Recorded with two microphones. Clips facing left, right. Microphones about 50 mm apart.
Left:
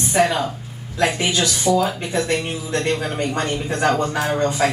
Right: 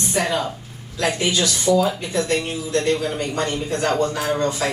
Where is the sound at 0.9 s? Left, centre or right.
Left.